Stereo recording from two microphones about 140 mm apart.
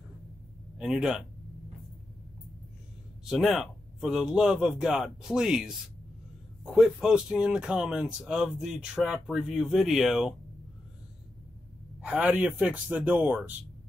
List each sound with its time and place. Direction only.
0.7 s speech: 5° right (ahead or behind)
3.3 s speech: centre (ahead or behind)
12.0 s speech: 10° right (ahead or behind)